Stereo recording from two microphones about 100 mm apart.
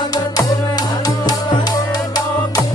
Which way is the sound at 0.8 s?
40° left (ahead or behind).